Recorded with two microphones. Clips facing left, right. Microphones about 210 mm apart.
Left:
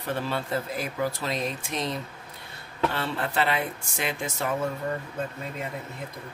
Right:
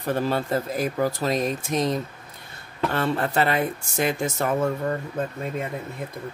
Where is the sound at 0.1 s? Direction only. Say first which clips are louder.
Right 5 dB; 40° right (ahead or behind).